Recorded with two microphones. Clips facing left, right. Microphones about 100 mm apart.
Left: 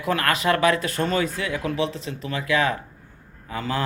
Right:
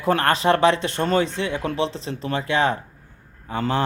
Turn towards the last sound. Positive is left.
turn(degrees=-30)  # may be behind; listen again after turning